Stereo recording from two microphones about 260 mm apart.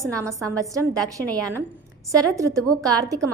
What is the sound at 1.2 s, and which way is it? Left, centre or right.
Speech, centre.